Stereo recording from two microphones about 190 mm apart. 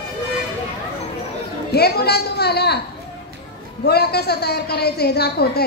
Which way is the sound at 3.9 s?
60° left (ahead or behind).